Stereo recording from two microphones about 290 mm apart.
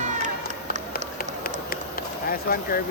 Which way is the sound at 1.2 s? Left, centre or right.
Left.